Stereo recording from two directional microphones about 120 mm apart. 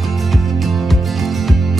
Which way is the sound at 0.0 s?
Centre (ahead or behind).